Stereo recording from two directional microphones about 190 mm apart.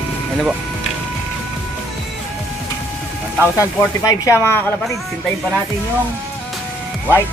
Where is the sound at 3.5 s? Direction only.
20° left (ahead or behind).